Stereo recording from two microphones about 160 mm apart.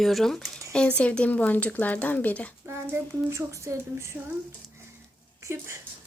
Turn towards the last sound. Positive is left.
turn(degrees=-15)  # may be behind; listen again after turning